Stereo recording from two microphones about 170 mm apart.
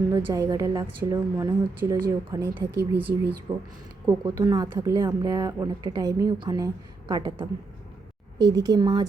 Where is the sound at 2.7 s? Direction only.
70° right (ahead or behind).